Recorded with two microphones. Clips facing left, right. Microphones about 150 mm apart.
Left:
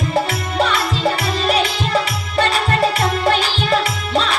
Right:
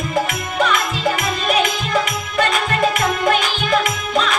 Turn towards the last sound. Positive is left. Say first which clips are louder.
# even
turn(degrees=30)  # may be behind; listen again after turning